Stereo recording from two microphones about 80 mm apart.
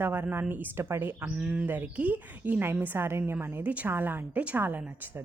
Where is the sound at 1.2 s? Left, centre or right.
Centre.